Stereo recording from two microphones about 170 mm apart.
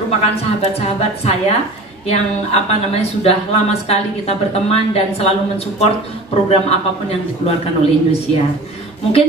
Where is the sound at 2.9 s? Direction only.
35° left (ahead or behind).